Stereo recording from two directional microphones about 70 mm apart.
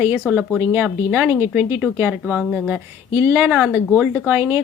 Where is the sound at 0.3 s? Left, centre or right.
Centre.